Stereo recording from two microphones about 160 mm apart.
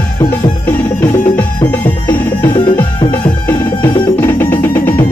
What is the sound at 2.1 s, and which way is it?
Music, 30° left (ahead or behind).